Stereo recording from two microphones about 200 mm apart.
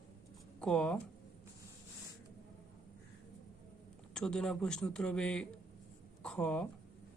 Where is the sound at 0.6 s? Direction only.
5° left (ahead or behind).